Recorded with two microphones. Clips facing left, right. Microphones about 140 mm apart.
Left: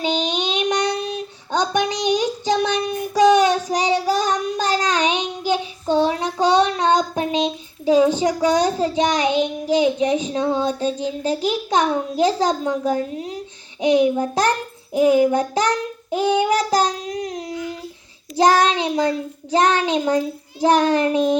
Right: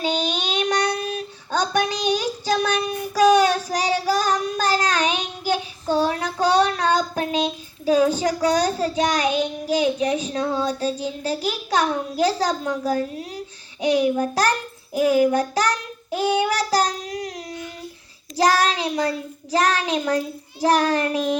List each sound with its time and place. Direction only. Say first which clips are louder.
0.0 s child singing: left 2 dB; 20° left (ahead or behind)
13.8 s a child's voice: left 3 dB; 25° left (ahead or behind)
14.9 s child singing: left 2 dB; 25° left (ahead or behind)
18.3 s a child's voice: left 3 dB; 25° left (ahead or behind)